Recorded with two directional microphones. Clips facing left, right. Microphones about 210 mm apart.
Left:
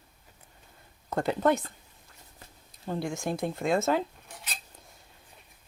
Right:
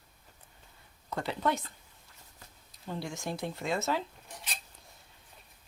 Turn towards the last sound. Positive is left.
turn(degrees=0)  # may be behind; listen again after turning